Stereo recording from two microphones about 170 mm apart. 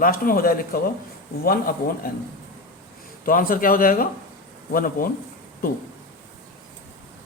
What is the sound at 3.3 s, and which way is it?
Speech, 55° left (ahead or behind).